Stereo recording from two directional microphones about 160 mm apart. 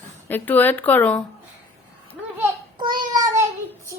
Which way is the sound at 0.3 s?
10° left (ahead or behind).